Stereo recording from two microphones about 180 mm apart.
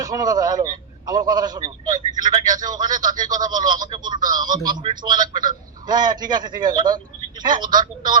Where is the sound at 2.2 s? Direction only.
20° right (ahead or behind).